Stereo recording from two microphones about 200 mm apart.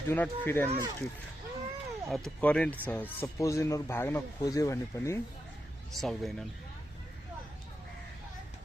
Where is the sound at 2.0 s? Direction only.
Centre (ahead or behind).